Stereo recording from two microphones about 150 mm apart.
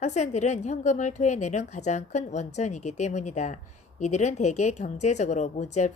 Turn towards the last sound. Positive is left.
turn(degrees=50)  # may be behind; listen again after turning